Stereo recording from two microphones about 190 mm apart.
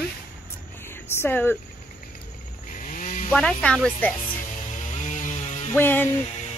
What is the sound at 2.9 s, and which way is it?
Chainsaw, 40° left (ahead or behind).